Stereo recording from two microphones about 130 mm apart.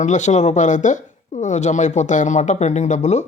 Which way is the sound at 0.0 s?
65° left (ahead or behind).